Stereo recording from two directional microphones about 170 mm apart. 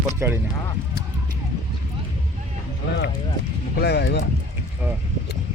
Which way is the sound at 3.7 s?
75° left (ahead or behind).